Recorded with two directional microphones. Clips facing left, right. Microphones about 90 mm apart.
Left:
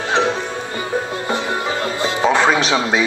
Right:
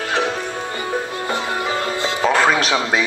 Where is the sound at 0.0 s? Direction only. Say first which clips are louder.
Left 3 dB; 25° left (ahead or behind).